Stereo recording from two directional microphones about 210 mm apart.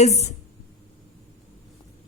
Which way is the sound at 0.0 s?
30° left (ahead or behind).